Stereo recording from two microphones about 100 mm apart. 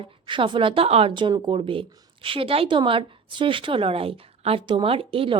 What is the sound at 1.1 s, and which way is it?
A woman's voice, 55° right (ahead or behind).